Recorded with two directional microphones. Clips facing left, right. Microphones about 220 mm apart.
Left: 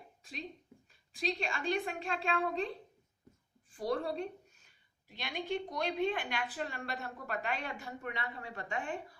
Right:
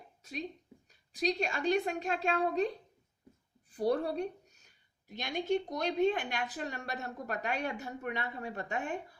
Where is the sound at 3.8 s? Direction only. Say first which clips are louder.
Right 4 dB; 40° right (ahead or behind).